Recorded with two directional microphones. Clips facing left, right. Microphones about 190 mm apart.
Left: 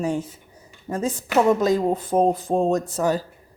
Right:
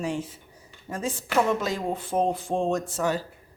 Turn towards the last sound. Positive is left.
turn(degrees=40)  # may be behind; listen again after turning